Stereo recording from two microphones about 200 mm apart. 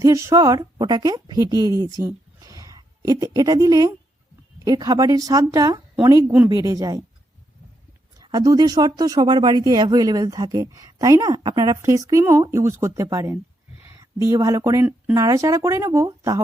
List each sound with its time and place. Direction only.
0.0 s a woman's voice: 15° right (ahead or behind)
8.2 s speech: 20° right (ahead or behind)